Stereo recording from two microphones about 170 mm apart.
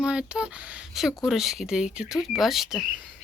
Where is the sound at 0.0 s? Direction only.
5° right (ahead or behind).